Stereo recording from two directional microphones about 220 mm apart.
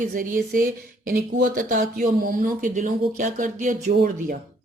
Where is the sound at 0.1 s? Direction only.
35° right (ahead or behind).